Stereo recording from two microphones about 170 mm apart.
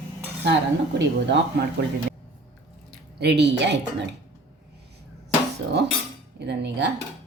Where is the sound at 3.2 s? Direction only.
80° right.